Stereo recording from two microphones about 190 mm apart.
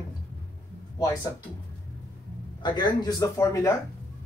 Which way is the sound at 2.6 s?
25° left (ahead or behind).